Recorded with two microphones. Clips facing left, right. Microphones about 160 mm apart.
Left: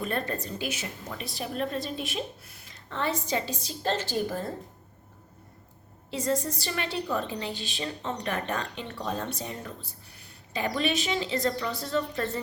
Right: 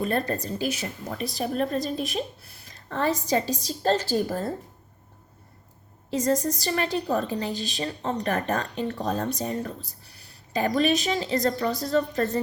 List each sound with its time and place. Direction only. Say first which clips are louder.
0.0 s a woman's voice: right 5 dB; 40° right (ahead or behind)
6.1 s a woman's voice: right 5 dB; 40° right (ahead or behind)